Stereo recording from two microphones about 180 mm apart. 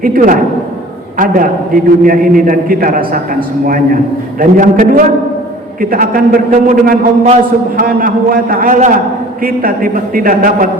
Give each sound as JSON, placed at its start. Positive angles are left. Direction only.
{"t": 0.0, "sound": "a man's voice", "side_deg": -50}